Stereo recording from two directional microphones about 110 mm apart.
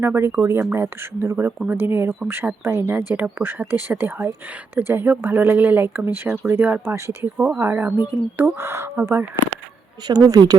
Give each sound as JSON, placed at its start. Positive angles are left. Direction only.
{"t": 0.0, "sound": "speech", "side_deg": -20}
{"t": 7.3, "sound": "speech", "side_deg": -10}
{"t": 10.1, "sound": "speech", "side_deg": -35}